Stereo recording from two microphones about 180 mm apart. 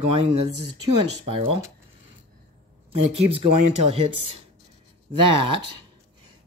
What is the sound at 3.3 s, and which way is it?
Speech, 35° right (ahead or behind).